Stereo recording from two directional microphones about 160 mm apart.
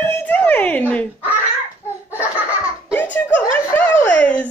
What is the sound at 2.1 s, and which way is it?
Laughter, 10° right (ahead or behind).